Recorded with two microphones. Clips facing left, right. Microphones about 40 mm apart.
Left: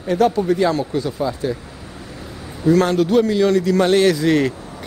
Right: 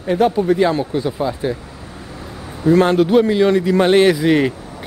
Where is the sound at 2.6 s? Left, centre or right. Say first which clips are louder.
Right 2 dB; right.